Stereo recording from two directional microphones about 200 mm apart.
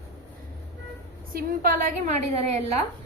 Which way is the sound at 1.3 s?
45° right (ahead or behind).